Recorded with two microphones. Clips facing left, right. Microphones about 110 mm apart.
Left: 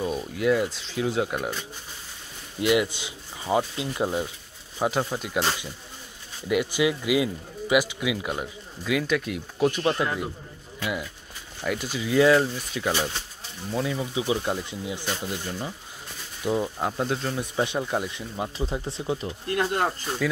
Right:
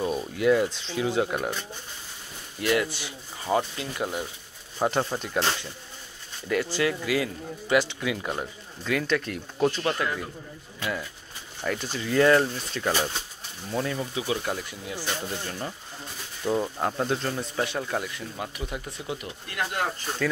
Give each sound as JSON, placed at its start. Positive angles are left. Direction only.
{"t": 0.0, "sound": "speech", "side_deg": 0}
{"t": 2.6, "sound": "speech", "side_deg": 20}
{"t": 4.7, "sound": "speech", "side_deg": 5}
{"t": 14.1, "sound": "speech", "side_deg": 20}
{"t": 16.4, "sound": "speech", "side_deg": 0}
{"t": 17.4, "sound": "speech", "side_deg": 15}